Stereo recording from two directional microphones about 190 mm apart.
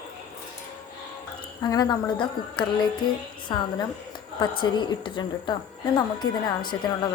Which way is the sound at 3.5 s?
25° left (ahead or behind).